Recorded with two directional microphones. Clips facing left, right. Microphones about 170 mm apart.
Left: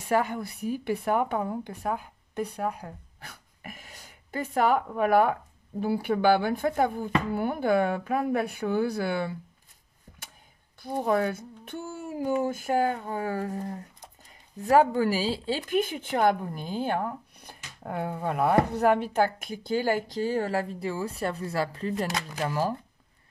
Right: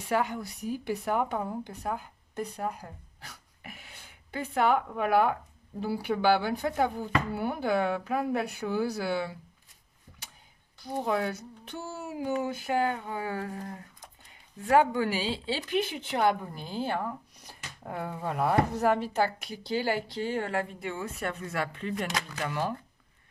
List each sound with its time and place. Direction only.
0.0 s a woman's voice: 50° left (ahead or behind)
10.8 s a woman's voice: 50° left (ahead or behind)
14.6 s a woman's voice: 40° left (ahead or behind)